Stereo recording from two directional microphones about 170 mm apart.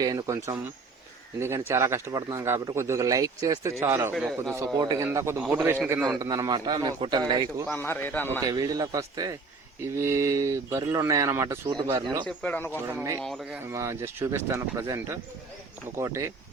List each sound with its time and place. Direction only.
0.0 s a man's voice: 20° right (ahead or behind)
4.1 s a man's voice: centre (ahead or behind)
4.5 s speech: 20° right (ahead or behind)
6.1 s a man's voice: 20° right (ahead or behind)
7.7 s a man's voice: 10° left (ahead or behind)
8.4 s a man's voice: 25° right (ahead or behind)
12.2 s a man's voice: 10° left (ahead or behind)
12.9 s speech: 10° right (ahead or behind)
13.2 s a man's voice: centre (ahead or behind)
13.7 s speech: 15° right (ahead or behind)